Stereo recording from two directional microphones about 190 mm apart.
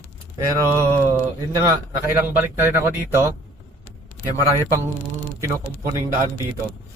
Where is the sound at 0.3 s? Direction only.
15° right (ahead or behind).